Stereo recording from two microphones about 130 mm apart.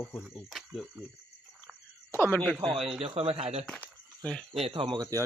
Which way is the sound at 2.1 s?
15° left (ahead or behind).